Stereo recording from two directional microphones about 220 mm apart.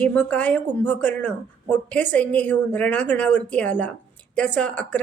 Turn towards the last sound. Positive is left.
turn(degrees=5)  # may be behind; listen again after turning